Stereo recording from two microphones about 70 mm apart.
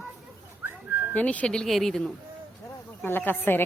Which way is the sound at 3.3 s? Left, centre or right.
Left.